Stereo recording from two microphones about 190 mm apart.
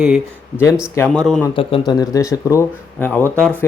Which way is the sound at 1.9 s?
20° left (ahead or behind).